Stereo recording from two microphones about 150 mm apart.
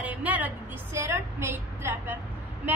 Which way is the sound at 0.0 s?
10° right (ahead or behind).